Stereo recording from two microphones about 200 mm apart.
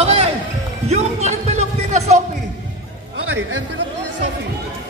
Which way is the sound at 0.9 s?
35° right (ahead or behind).